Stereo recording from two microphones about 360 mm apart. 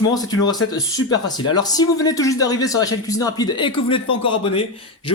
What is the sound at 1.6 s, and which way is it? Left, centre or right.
Speech, centre.